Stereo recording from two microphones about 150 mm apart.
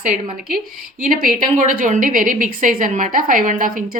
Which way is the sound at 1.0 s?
60° right (ahead or behind).